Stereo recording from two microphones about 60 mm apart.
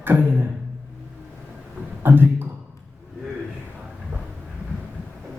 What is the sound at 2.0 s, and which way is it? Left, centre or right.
Speech, right.